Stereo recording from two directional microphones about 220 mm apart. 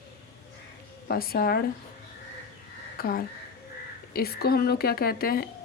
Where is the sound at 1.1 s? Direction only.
45° left (ahead or behind).